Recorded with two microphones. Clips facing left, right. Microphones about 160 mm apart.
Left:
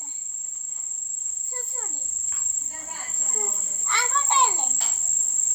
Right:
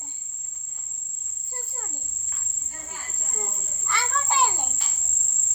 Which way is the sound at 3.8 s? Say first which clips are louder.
Even; centre (ahead or behind).